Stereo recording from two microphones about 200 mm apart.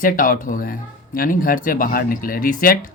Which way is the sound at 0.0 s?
45° left (ahead or behind).